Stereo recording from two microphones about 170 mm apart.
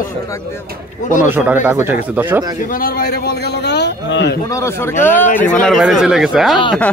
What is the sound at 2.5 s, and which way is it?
A man's voice, 55° left (ahead or behind).